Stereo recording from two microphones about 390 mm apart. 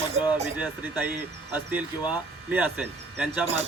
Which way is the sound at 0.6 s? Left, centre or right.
Centre.